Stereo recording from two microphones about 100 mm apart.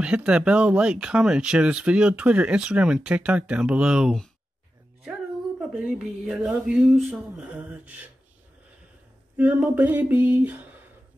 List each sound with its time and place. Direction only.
0.0 s speech: 10° right (ahead or behind)
5.6 s speech: centre (ahead or behind)
9.4 s speech: 15° right (ahead or behind)